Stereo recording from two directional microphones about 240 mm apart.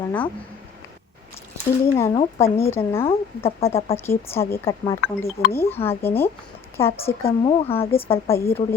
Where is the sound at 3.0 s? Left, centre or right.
Left.